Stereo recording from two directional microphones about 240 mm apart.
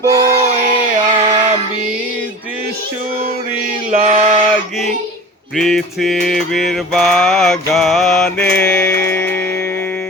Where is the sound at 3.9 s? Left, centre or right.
Right.